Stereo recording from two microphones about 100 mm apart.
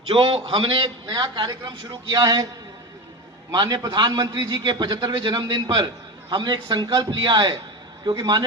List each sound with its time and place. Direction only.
0.1 s a man's voice: 60° right (ahead or behind)
1.2 s a man's voice: 45° right (ahead or behind)
3.5 s a man's voice: 50° right (ahead or behind)